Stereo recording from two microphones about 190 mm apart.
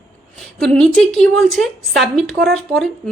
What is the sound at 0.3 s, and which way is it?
A woman's voice, 5° left (ahead or behind).